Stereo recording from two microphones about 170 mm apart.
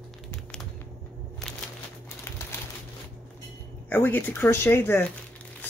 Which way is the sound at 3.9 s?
10° left (ahead or behind).